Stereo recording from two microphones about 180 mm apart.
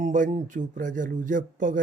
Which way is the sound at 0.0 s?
45° right (ahead or behind).